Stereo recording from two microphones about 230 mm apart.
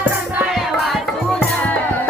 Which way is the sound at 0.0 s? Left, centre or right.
Centre.